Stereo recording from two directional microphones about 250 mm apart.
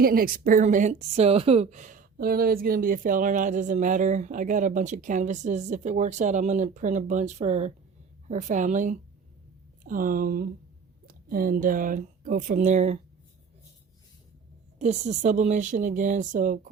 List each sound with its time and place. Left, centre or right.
0.0 s speech: right
14.8 s speech: right